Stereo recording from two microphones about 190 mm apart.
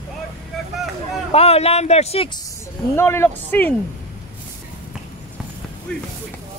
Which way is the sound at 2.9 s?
15° left (ahead or behind).